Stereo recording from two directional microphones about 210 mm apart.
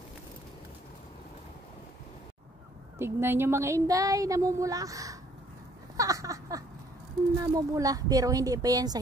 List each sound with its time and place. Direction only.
3.0 s speech: 10° right (ahead or behind)
5.9 s a sound: 15° right (ahead or behind)
7.5 s speech: 15° right (ahead or behind)